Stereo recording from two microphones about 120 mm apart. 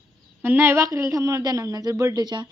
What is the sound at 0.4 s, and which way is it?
A woman's voice, 20° right (ahead or behind).